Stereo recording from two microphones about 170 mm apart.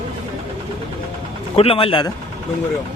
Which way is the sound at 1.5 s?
35° left (ahead or behind).